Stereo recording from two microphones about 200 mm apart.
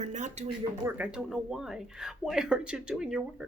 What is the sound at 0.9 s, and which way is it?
Speech, 5° right (ahead or behind).